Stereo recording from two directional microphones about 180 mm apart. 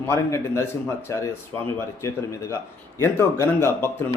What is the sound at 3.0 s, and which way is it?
Speech, 15° left (ahead or behind).